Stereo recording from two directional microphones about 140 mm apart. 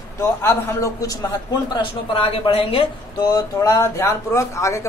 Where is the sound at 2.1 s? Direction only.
40° left (ahead or behind).